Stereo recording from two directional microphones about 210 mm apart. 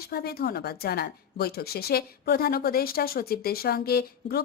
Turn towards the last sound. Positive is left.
turn(degrees=45)  # may be behind; listen again after turning